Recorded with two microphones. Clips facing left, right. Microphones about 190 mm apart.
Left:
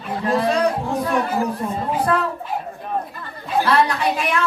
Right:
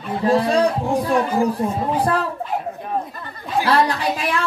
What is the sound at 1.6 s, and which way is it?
Speech, 20° right (ahead or behind).